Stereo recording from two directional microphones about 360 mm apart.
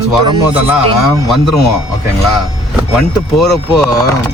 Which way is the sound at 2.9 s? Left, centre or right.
Centre.